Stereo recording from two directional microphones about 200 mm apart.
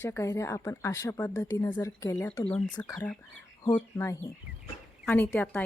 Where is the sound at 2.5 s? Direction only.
25° left (ahead or behind).